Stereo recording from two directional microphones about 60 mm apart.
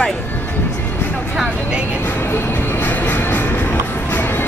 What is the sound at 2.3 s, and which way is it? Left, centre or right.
Music, left.